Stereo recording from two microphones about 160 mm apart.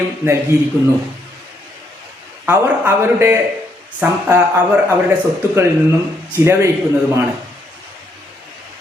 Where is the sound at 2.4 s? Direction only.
15° right (ahead or behind).